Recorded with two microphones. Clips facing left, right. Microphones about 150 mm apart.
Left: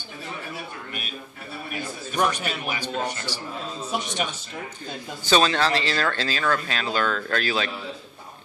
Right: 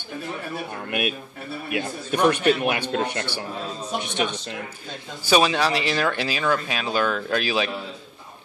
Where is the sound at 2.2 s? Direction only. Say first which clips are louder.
Right 8 dB; 60° right (ahead or behind).